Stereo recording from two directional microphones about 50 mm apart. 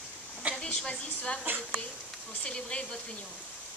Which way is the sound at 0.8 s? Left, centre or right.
Left.